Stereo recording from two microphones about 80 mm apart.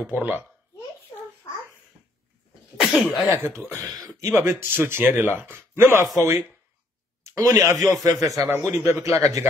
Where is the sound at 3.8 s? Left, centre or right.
Right.